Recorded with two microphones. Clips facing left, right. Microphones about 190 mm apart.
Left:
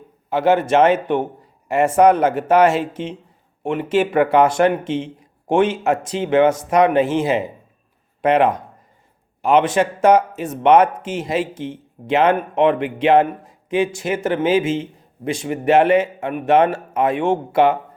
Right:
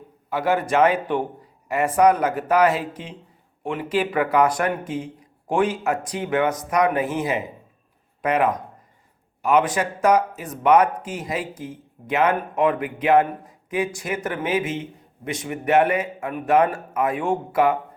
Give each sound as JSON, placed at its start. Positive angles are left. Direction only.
{"t": 0.3, "sound": "a man's voice", "side_deg": 25}